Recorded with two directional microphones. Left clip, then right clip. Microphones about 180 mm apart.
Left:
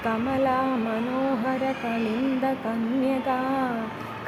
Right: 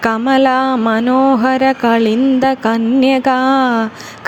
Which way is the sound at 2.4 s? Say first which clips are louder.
Right 13 dB; 55° right (ahead or behind).